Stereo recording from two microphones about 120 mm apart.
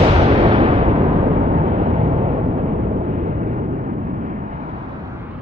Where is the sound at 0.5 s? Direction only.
45° right (ahead or behind).